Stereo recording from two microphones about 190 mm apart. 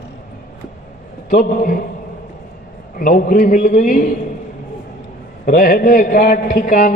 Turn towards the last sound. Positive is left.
turn(degrees=45)  # may be behind; listen again after turning